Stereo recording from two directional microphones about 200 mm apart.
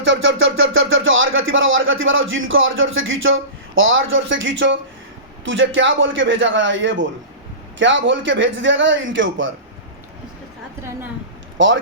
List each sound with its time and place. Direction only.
0.0 s a man's voice: 75° right (ahead or behind)
11.5 s speech: 70° right (ahead or behind)